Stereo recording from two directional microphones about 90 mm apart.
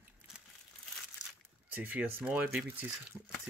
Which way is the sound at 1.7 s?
15° right (ahead or behind).